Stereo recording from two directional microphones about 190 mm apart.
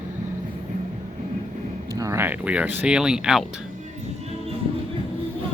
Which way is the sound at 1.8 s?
15° right (ahead or behind).